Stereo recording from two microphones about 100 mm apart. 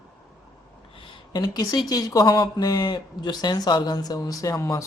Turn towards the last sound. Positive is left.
turn(degrees=30)  # may be behind; listen again after turning